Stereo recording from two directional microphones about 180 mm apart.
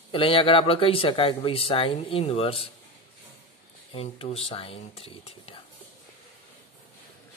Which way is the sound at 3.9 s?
35° left (ahead or behind).